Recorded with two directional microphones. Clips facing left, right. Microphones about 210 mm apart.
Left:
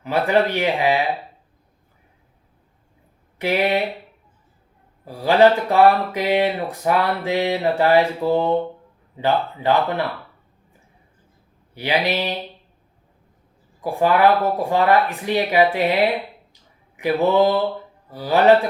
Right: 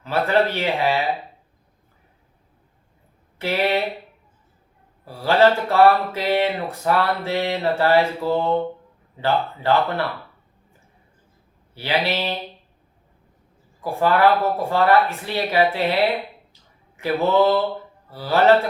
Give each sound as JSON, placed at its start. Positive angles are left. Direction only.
{"t": 0.0, "sound": "speech", "side_deg": 15}
{"t": 3.3, "sound": "speech", "side_deg": 15}
{"t": 5.0, "sound": "speech", "side_deg": 15}
{"t": 11.7, "sound": "speech", "side_deg": 15}
{"t": 13.8, "sound": "speech", "side_deg": 15}